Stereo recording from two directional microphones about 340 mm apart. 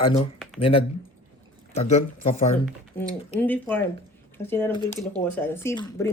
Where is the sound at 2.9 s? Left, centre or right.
Centre.